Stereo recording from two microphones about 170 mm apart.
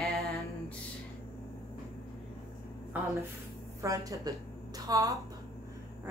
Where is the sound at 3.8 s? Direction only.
20° right (ahead or behind).